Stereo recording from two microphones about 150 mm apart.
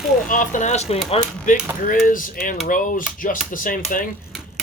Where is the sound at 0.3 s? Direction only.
60° left (ahead or behind); by 1.2 s 45° left (ahead or behind).